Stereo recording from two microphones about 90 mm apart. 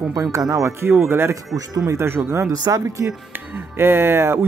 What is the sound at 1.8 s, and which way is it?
Speech, 30° right (ahead or behind).